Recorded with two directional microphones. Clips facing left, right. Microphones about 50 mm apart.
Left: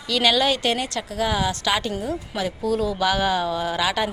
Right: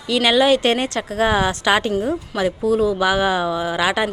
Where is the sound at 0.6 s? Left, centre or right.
Right.